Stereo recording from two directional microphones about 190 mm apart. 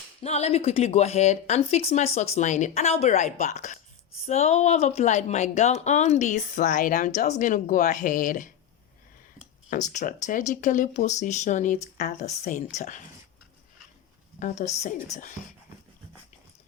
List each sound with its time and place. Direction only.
0.2 s a woman's voice: 35° left (ahead or behind)
9.9 s a woman's voice: 40° left (ahead or behind)
14.3 s a woman's voice: 40° left (ahead or behind)